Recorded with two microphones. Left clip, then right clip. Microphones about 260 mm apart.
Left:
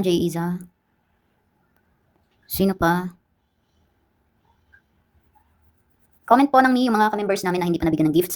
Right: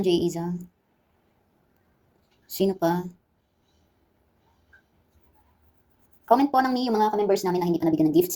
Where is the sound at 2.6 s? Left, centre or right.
Left.